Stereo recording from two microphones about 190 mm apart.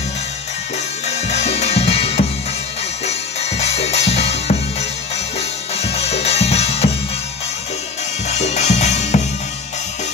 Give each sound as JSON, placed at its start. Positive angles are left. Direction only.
{"t": 1.0, "sound": "music", "side_deg": 35}
{"t": 8.3, "sound": "music", "side_deg": 35}